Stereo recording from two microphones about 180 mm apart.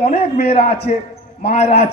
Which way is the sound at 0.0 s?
35° left (ahead or behind).